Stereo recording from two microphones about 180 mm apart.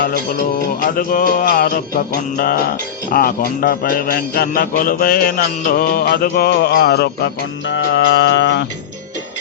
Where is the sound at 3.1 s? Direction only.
55° left (ahead or behind).